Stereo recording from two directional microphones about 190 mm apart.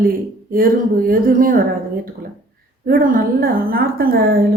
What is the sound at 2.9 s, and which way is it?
A woman's voice, 50° right (ahead or behind).